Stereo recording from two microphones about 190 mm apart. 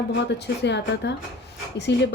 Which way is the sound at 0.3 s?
65° left (ahead or behind).